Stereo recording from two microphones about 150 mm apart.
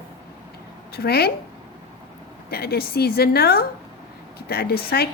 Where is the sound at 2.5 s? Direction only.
90° left.